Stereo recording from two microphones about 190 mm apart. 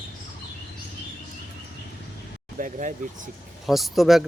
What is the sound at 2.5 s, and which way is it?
Speech, 45° right (ahead or behind).